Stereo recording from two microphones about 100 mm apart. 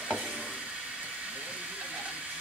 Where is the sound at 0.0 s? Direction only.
10° right (ahead or behind).